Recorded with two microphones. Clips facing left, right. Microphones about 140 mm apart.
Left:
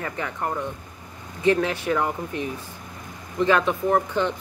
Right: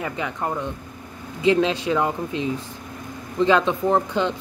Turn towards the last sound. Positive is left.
turn(degrees=-20)  # may be behind; listen again after turning